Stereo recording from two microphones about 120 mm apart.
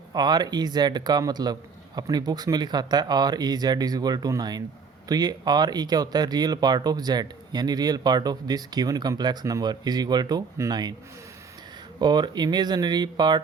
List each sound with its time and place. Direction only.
0.1 s speech: 35° right (ahead or behind)
11.9 s speech: 35° right (ahead or behind)